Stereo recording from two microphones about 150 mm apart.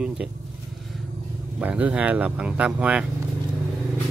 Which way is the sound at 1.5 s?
10° right (ahead or behind).